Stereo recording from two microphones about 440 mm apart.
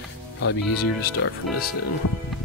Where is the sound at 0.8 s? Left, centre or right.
Left.